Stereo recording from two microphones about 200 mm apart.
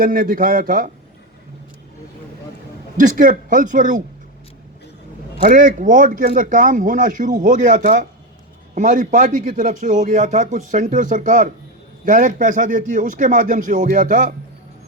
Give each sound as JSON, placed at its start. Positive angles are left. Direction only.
{"t": 0.0, "sound": "a man's voice", "side_deg": -45}
{"t": 3.0, "sound": "a man's voice", "side_deg": -40}
{"t": 5.4, "sound": "a man's voice", "side_deg": -45}